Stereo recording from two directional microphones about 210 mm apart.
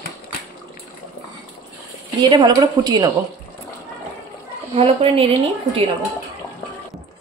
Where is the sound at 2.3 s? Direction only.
20° right (ahead or behind).